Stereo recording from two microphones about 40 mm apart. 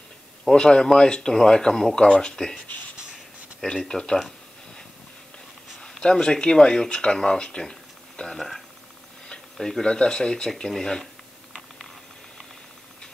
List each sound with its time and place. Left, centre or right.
0.6 s speech: left
3.6 s speech: centre
5.8 s speech: centre
8.4 s speech: centre
9.8 s speech: centre